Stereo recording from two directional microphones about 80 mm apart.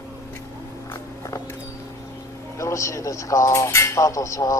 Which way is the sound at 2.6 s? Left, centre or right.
Left.